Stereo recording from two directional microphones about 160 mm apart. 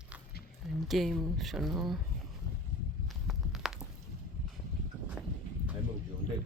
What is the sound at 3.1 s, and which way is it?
Walk, centre (ahead or behind).